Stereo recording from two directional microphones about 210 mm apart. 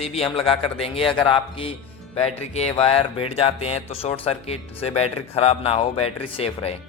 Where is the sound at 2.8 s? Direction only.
30° left (ahead or behind).